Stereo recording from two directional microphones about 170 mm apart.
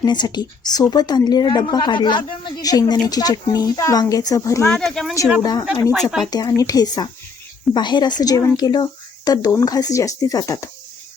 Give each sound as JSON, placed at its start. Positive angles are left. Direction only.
{"t": 0.0, "sound": "a woman's voice", "side_deg": 25}
{"t": 4.7, "sound": "speech", "side_deg": 5}
{"t": 5.4, "sound": "a woman's voice", "side_deg": 25}
{"t": 5.9, "sound": "speech", "side_deg": -5}
{"t": 6.3, "sound": "a woman's voice", "side_deg": 20}